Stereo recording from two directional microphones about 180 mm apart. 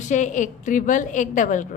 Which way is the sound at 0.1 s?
45° left (ahead or behind).